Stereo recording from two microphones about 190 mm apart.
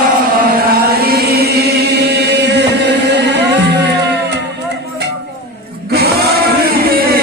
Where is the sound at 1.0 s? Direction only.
55° right (ahead or behind).